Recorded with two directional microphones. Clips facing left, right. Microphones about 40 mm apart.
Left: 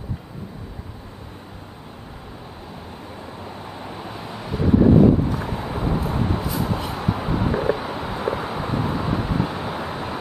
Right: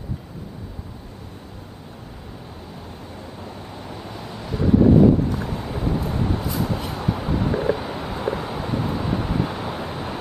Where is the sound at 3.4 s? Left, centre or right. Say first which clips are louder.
Left 1 dB; centre.